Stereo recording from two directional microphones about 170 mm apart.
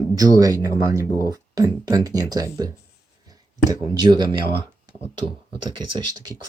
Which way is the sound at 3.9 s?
25° right (ahead or behind).